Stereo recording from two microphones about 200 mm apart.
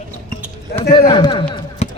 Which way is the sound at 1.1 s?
25° left (ahead or behind).